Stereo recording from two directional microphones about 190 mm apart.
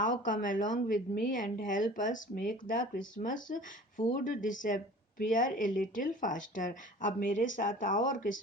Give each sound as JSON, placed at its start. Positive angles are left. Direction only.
{"t": 0.0, "sound": "speech", "side_deg": 45}